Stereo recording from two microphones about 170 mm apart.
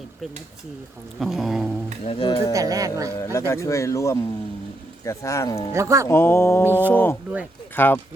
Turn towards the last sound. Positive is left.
turn(degrees=10)  # may be behind; listen again after turning